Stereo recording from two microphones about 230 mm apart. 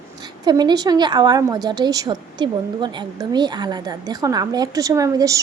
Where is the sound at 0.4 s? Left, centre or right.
Centre.